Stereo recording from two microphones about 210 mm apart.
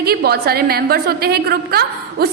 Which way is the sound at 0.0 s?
45° right (ahead or behind).